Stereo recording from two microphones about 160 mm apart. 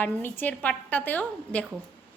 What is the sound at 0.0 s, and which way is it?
A woman's voice, 10° left (ahead or behind).